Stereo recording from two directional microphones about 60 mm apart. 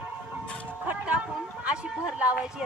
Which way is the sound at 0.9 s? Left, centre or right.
Right.